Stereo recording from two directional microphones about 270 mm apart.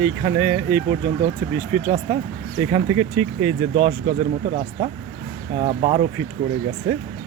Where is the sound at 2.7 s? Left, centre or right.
Centre.